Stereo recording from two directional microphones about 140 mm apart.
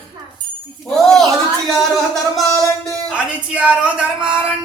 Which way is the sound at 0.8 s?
Centre (ahead or behind).